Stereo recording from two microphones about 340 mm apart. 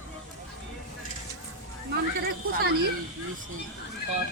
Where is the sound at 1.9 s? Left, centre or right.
Right.